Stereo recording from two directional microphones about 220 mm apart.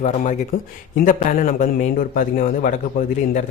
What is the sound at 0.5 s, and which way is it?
A man's voice, 40° left (ahead or behind).